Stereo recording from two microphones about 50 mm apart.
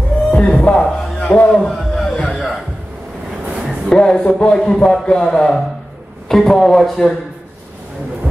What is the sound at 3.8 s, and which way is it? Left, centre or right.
A man's voice, centre.